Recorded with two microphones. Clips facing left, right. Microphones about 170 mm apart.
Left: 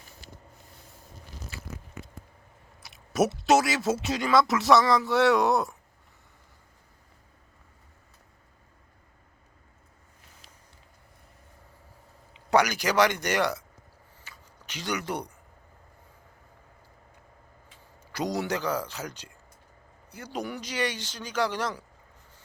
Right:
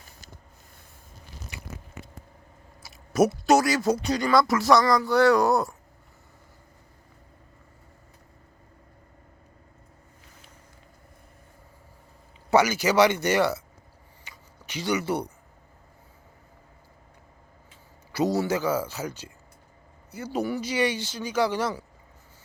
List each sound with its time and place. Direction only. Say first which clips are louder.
1.5 s biting: right 2 dB; 20° right (ahead or behind)
2.8 s speech: right 4 dB; centre (ahead or behind)
12.5 s speech: right 3 dB; 5° right (ahead or behind)
14.3 s a sound: right 2 dB; 10° right (ahead or behind)
18.1 s speech: right 5 dB; 5° right (ahead or behind)